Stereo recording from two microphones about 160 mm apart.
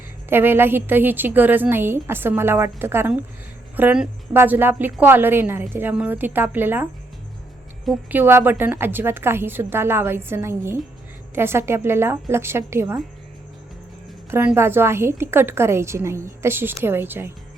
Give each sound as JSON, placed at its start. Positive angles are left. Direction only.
{"t": 0.3, "sound": "a woman's voice", "side_deg": -15}
{"t": 8.1, "sound": "a woman's voice", "side_deg": -15}
{"t": 14.3, "sound": "a woman's voice", "side_deg": -15}